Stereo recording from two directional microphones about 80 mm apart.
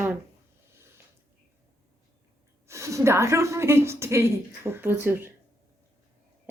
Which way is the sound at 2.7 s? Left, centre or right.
Right.